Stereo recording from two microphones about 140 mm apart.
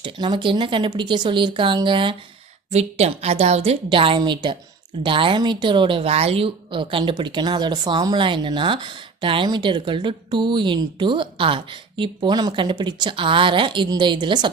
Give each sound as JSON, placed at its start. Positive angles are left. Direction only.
{"t": 0.0, "sound": "a woman's voice", "side_deg": -35}
{"t": 2.7, "sound": "a woman's voice", "side_deg": -50}